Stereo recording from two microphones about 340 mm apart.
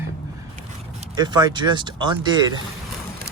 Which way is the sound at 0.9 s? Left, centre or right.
Centre.